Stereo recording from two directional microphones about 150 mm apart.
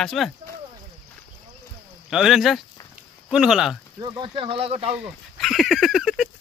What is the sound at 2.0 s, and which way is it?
Speech, 5° right (ahead or behind).